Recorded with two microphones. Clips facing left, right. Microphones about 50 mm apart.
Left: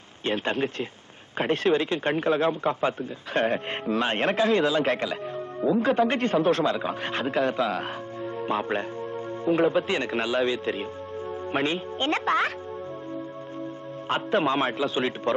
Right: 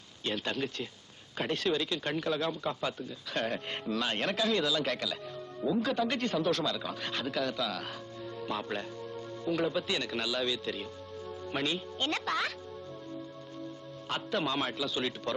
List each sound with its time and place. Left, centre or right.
0.3 s speech: left
14.1 s speech: left